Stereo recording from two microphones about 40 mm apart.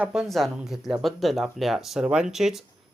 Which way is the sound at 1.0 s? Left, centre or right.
Centre.